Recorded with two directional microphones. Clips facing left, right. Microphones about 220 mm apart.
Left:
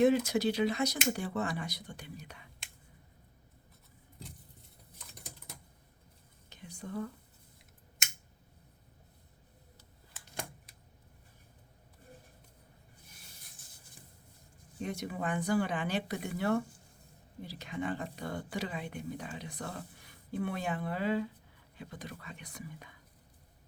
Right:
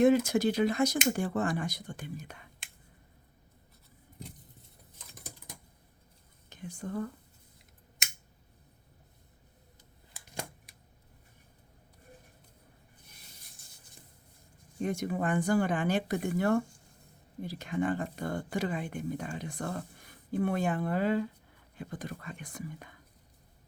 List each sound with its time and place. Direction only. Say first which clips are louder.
0.0 s a woman's voice: right 3 dB; 50° right (ahead or behind)
4.9 s typing: right 2 dB; centre (ahead or behind)
6.5 s whispering: right 4 dB; 50° right (ahead or behind)
14.8 s a woman's voice: right 6 dB; 50° right (ahead or behind)